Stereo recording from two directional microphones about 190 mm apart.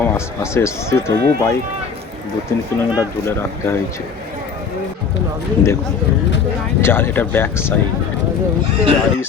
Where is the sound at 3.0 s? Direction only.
15° left (ahead or behind).